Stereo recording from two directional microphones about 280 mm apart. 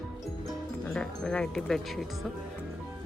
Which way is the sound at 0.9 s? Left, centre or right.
Centre.